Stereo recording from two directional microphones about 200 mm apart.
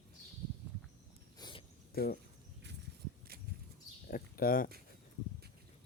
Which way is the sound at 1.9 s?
50° left (ahead or behind).